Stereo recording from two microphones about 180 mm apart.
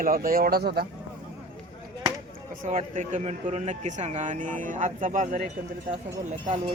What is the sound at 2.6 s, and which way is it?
A man's voice, 45° right (ahead or behind).